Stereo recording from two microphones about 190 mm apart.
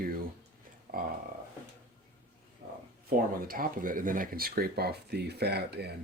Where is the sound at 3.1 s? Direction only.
50° right (ahead or behind).